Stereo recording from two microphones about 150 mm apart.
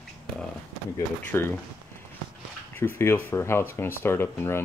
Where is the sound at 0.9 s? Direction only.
15° left (ahead or behind).